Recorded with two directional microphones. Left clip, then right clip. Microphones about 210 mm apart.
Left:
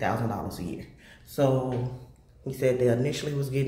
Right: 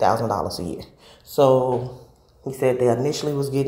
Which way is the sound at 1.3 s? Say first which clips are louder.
Right 9 dB; 25° right (ahead or behind).